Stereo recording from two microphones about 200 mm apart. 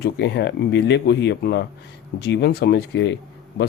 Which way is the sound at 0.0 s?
55° left (ahead or behind).